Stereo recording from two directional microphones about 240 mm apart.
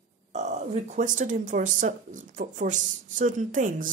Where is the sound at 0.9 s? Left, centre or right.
Right.